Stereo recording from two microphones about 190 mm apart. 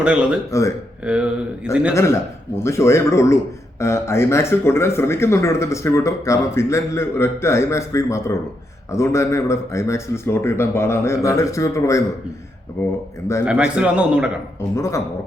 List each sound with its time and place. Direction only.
0.0 s a man's voice: 5° right (ahead or behind)
2.0 s speech: 15° left (ahead or behind)
13.4 s a man's voice: 5° right (ahead or behind)
14.8 s speech: 15° left (ahead or behind)